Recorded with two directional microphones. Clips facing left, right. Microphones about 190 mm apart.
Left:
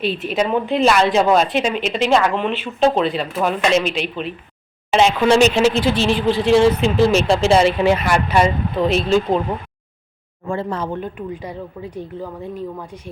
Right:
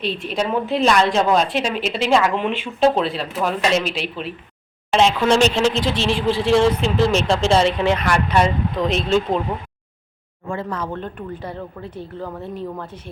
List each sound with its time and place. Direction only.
0.0 s a woman's voice: 5° left (ahead or behind)
10.5 s speech: 30° left (ahead or behind)
10.9 s speech: 10° left (ahead or behind)